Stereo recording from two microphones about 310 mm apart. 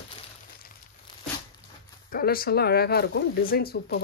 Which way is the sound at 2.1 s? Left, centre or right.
Left.